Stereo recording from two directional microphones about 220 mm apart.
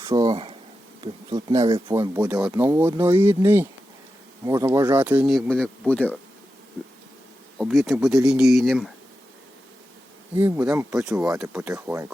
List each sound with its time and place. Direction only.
0.1 s a sound: 20° right (ahead or behind)
1.0 s speech: 20° right (ahead or behind); by 6.1 s 5° left (ahead or behind)
7.6 s speech: centre (ahead or behind)
10.3 s speech: 5° right (ahead or behind)